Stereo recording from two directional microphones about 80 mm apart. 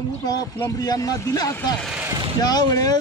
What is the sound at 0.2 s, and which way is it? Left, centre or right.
A man's voice, left.